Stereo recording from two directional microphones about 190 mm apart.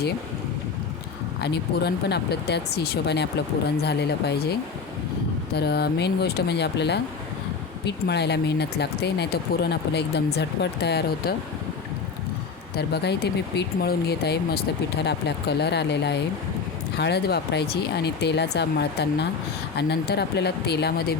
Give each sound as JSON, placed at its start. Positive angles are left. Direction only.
{"t": 1.4, "sound": "speech", "side_deg": 60}
{"t": 5.5, "sound": "speech", "side_deg": 60}
{"t": 12.7, "sound": "speech", "side_deg": 60}